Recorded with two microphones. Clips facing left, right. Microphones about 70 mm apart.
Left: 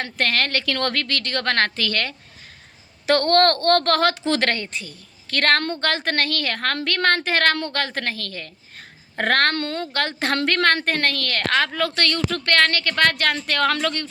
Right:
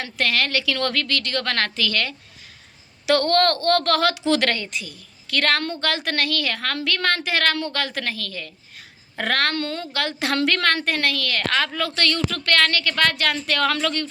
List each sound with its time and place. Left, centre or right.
0.0 s a woman's voice: left